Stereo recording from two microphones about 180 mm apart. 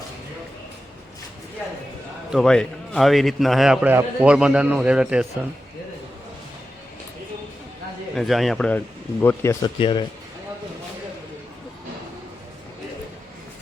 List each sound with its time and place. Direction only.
2.3 s a man's voice: 5° left (ahead or behind)
8.1 s a man's voice: centre (ahead or behind)
9.2 s speech: 15° left (ahead or behind)